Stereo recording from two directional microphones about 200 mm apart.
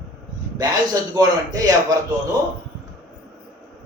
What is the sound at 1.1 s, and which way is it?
Speech, 20° right (ahead or behind).